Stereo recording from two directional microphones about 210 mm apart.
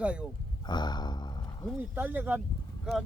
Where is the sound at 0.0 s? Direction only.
5° right (ahead or behind).